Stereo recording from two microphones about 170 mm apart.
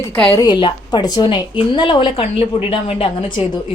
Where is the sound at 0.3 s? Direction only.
20° left (ahead or behind).